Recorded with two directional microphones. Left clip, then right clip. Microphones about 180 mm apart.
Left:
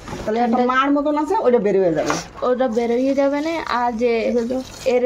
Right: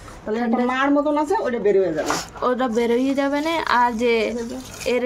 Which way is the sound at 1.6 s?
50° left (ahead or behind).